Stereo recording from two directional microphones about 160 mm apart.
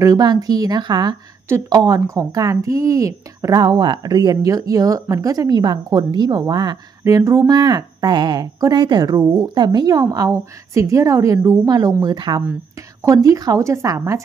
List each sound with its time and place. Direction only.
0.0 s speech: 25° right (ahead or behind)